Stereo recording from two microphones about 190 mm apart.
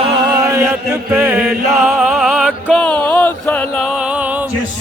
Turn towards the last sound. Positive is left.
turn(degrees=10)  # may be behind; listen again after turning